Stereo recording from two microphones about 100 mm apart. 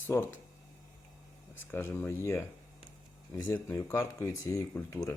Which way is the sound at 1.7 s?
20° left (ahead or behind).